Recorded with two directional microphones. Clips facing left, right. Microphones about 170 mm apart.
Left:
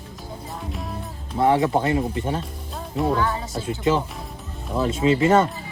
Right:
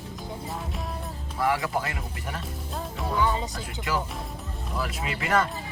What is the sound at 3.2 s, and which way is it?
Speech, 20° right (ahead or behind).